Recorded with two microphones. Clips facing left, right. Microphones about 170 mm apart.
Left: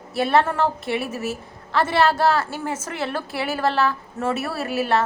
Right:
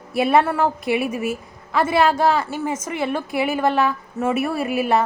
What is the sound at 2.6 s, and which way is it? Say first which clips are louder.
Speech: right 3 dB; 10° right (ahead or behind).